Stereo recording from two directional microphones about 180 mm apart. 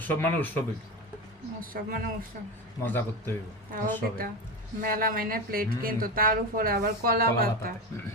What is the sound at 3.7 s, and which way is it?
Speech, 50° right (ahead or behind).